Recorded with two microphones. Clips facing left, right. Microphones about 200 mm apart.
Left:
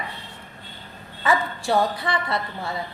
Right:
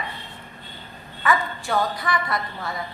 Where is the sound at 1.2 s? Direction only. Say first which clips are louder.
Left 1 dB; 30° left (ahead or behind).